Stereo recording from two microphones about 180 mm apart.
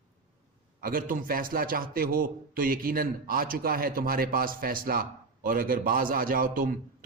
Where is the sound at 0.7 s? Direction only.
50° right (ahead or behind).